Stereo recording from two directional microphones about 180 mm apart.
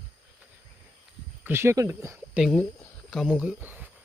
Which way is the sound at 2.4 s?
5° left (ahead or behind).